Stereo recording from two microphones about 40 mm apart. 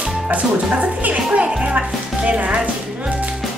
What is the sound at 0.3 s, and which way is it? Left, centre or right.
Speech, right.